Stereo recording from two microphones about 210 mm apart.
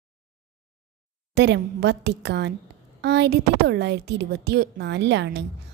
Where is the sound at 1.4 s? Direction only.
55° right (ahead or behind).